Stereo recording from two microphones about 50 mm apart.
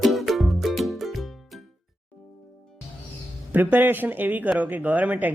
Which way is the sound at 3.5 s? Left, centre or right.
Right.